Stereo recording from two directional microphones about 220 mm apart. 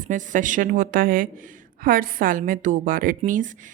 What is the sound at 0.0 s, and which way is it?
A woman's voice, 35° right (ahead or behind).